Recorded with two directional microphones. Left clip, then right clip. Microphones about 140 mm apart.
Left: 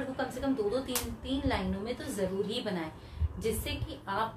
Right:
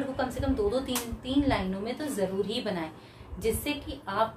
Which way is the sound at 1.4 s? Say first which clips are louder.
Right 4 dB; 30° right (ahead or behind).